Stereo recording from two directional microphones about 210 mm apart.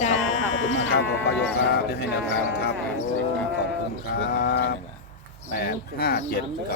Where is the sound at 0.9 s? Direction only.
50° left (ahead or behind).